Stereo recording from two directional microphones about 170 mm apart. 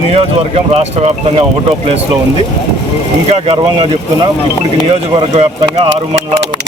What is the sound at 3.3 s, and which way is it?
Speech, 35° right (ahead or behind).